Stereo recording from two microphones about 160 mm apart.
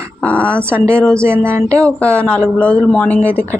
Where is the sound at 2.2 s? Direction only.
5° left (ahead or behind).